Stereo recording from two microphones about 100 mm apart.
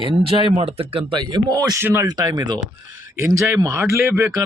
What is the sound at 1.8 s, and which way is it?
Speech, 25° right (ahead or behind).